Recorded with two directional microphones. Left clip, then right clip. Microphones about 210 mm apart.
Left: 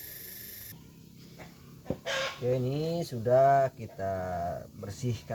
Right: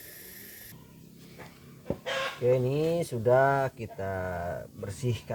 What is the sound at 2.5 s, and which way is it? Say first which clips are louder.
Speech: right 7 dB; 40° right (ahead or behind).